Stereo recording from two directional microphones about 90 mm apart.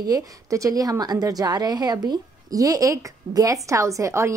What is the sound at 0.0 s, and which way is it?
A woman's voice, 40° right (ahead or behind).